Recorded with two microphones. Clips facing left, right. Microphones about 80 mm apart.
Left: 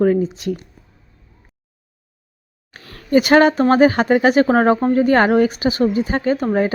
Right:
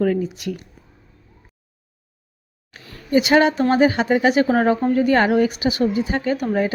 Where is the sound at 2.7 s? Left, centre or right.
Left.